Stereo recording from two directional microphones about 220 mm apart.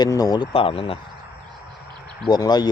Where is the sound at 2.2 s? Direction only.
20° left (ahead or behind).